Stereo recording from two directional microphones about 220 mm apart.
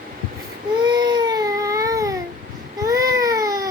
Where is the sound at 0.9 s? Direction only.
20° right (ahead or behind).